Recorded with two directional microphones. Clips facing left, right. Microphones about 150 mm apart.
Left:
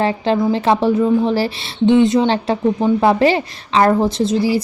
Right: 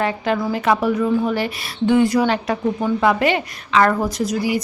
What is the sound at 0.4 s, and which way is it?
A woman's voice, 30° left (ahead or behind).